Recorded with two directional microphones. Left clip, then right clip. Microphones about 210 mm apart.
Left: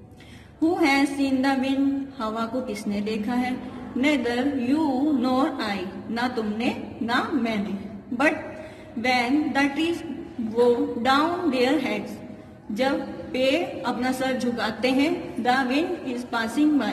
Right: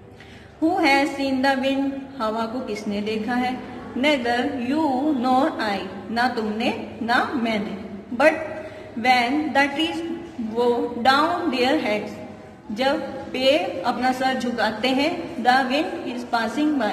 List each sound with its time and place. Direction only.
0.7 s speech: 25° left (ahead or behind)
9.0 s speech: 25° left (ahead or behind)